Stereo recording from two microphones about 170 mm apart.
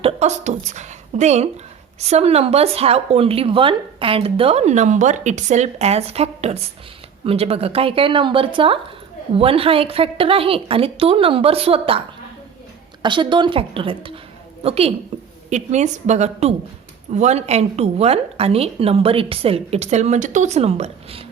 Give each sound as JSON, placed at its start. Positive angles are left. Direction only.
{"t": 0.0, "sound": "a woman's voice", "side_deg": -40}